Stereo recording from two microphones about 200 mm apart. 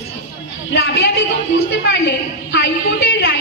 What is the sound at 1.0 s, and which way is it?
A woman's voice, 65° left (ahead or behind).